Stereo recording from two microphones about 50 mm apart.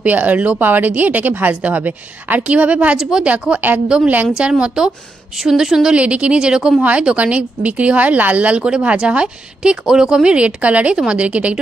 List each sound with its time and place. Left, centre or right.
0.0 s speech: right
3.0 s a woman's voice: centre
5.4 s a woman's voice: centre
5.9 s speech: right
6.8 s speech: right